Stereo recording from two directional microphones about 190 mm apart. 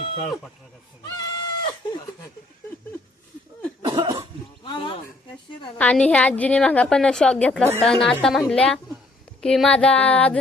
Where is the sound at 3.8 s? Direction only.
25° right (ahead or behind).